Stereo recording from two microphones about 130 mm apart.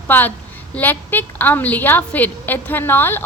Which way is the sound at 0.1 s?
15° left (ahead or behind).